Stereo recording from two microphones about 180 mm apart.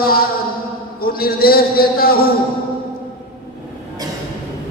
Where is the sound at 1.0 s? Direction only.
55° left (ahead or behind).